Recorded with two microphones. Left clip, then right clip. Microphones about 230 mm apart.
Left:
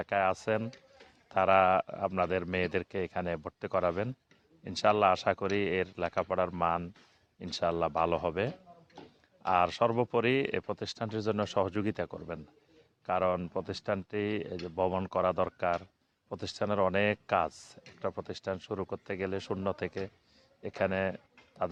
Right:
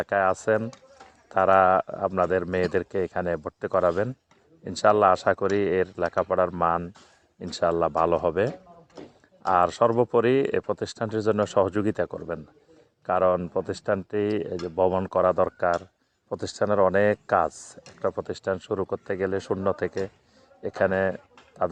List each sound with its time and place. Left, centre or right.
0.0 s speech: left